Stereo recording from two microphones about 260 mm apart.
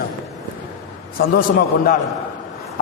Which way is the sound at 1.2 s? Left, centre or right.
Left.